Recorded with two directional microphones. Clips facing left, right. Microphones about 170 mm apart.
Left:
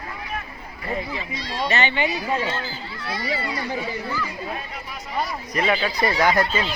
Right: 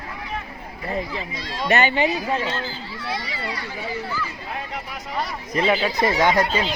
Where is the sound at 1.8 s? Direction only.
40° right (ahead or behind).